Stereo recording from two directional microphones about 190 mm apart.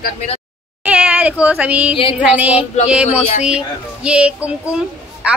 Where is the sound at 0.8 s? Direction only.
10° right (ahead or behind).